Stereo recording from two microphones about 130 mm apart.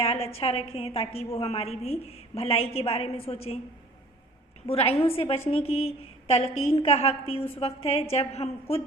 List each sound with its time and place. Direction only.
0.0 s a woman's voice: 50° left (ahead or behind)
4.7 s a woman's voice: 50° left (ahead or behind)